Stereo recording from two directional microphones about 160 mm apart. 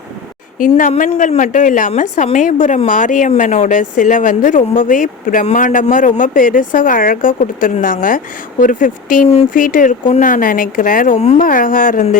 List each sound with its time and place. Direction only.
0.6 s a woman's voice: 55° left (ahead or behind)
11.3 s a woman's voice: 60° left (ahead or behind)